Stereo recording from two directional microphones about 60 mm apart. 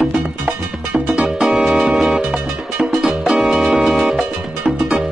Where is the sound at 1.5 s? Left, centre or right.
Centre.